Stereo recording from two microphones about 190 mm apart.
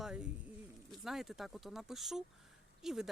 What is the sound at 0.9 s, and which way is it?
Speech, centre (ahead or behind).